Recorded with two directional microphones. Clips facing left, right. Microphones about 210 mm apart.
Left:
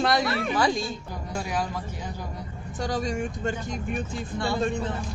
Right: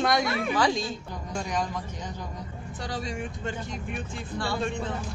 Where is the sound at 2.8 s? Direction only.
45° left (ahead or behind).